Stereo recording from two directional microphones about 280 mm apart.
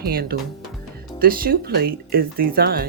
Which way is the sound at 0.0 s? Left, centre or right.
Right.